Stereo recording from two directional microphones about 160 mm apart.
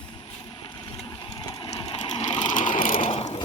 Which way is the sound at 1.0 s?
30° left (ahead or behind).